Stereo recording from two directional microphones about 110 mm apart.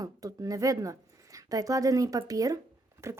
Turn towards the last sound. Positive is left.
turn(degrees=-30)  # may be behind; listen again after turning